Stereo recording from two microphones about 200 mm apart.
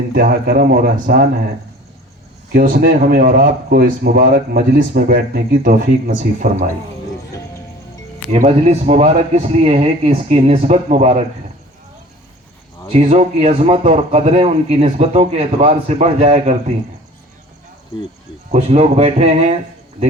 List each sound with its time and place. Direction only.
0.1 s speech: 45° right (ahead or behind)
2.5 s speech: 45° right (ahead or behind)
8.3 s a man's voice: 35° right (ahead or behind)
12.9 s a man's voice: 30° right (ahead or behind)
18.5 s a man's voice: 30° right (ahead or behind)